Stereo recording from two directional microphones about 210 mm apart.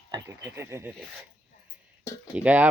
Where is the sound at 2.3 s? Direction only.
5° right (ahead or behind).